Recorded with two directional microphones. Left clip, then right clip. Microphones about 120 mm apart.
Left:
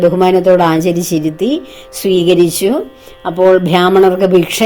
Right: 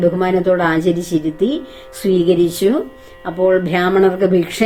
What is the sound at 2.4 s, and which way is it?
Speech, 55° left (ahead or behind).